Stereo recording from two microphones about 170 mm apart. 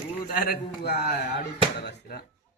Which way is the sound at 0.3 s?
60° left (ahead or behind).